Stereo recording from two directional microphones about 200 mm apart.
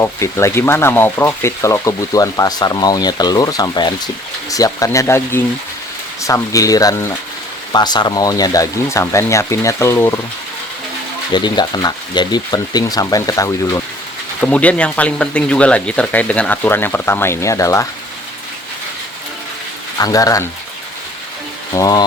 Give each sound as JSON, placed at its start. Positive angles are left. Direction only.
{"t": 0.0, "sound": "speech", "side_deg": 15}
{"t": 11.3, "sound": "speech", "side_deg": 20}
{"t": 20.0, "sound": "speech", "side_deg": 15}
{"t": 21.8, "sound": "speech", "side_deg": 20}